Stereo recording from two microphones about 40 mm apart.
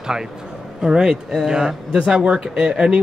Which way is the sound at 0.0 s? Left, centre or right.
Centre.